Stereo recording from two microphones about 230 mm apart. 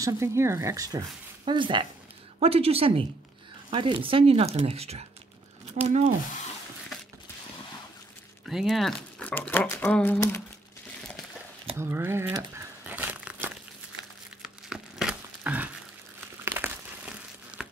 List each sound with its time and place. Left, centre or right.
0.0 s speech: centre; by 6.1 s right
8.5 s speech: centre
11.8 s crumpling: centre
17.6 s a sound: centre